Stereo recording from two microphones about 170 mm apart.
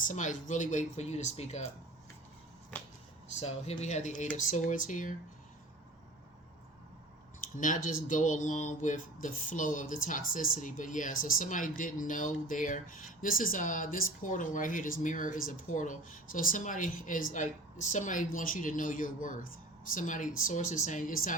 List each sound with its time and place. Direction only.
0.0 s speech: 45° left (ahead or behind)
2.7 s finger snapping: 10° left (ahead or behind)
3.4 s speech: 40° left (ahead or behind)
7.5 s speech: 50° left (ahead or behind)